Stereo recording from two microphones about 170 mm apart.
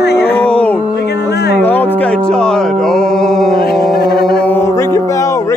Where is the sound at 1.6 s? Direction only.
10° left (ahead or behind).